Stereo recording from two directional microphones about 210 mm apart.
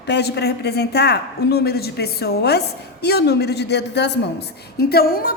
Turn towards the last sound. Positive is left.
turn(degrees=45)  # may be behind; listen again after turning